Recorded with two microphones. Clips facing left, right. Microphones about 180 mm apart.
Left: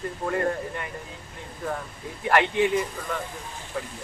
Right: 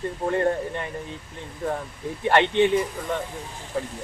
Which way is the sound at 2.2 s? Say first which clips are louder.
Right 3 dB; 30° right (ahead or behind).